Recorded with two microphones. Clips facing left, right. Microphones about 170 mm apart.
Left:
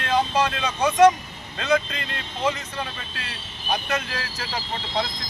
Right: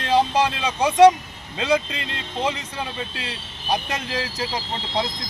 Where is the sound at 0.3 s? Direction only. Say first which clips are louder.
Right 2 dB; 15° right (ahead or behind).